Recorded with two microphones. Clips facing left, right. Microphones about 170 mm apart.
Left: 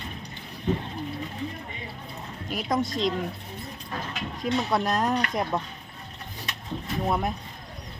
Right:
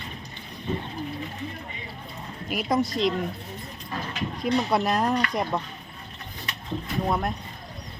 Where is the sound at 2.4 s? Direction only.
5° right (ahead or behind).